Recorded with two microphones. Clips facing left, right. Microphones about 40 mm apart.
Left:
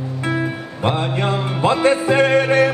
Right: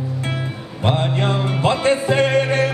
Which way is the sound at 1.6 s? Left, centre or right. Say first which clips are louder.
Left 3 dB; left.